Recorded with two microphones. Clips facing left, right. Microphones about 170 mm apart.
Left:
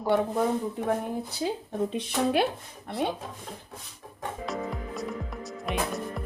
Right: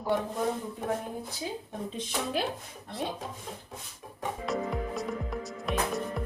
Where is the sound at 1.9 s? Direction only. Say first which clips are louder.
Left 5 dB; 65° left (ahead or behind).